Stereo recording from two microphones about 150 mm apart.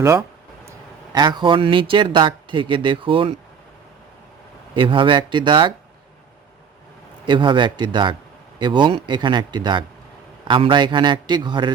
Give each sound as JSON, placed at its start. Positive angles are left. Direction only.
{"t": 0.0, "sound": "speech", "side_deg": -20}
{"t": 4.7, "sound": "speech", "side_deg": -35}
{"t": 7.3, "sound": "speech", "side_deg": -30}